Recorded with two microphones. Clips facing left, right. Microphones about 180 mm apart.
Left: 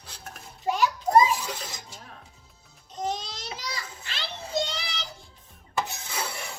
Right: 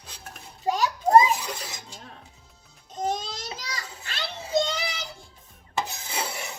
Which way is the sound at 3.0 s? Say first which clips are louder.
Right 3 dB; 45° right (ahead or behind).